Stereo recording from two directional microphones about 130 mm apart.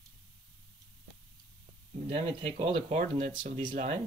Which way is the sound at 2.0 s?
45° right (ahead or behind).